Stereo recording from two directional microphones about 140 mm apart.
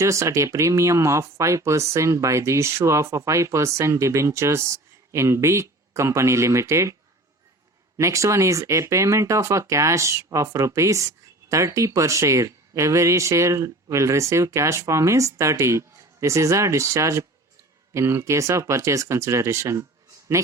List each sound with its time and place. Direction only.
0.0 s speech: 20° right (ahead or behind)
7.9 s speech: 20° right (ahead or behind)